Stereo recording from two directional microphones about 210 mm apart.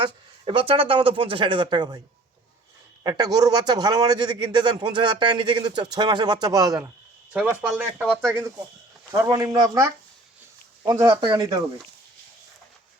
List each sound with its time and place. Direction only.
0.0 s a man's voice: 25° right (ahead or behind)
3.0 s a man's voice: 20° right (ahead or behind)